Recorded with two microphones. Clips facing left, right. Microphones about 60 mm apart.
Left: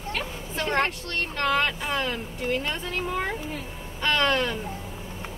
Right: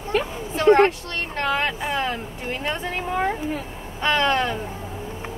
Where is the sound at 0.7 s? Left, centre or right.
Right.